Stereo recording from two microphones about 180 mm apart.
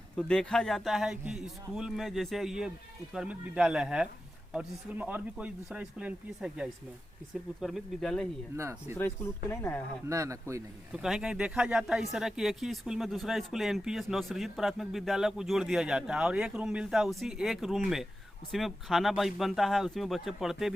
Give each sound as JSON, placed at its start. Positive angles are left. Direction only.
{"t": 0.2, "sound": "speech", "side_deg": 5}
{"t": 8.5, "sound": "speech", "side_deg": -15}
{"t": 9.0, "sound": "speech", "side_deg": 10}
{"t": 10.1, "sound": "speech", "side_deg": -15}
{"t": 10.9, "sound": "speech", "side_deg": -5}